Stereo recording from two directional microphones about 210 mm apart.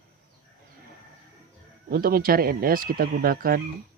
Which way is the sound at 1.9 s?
45° right (ahead or behind).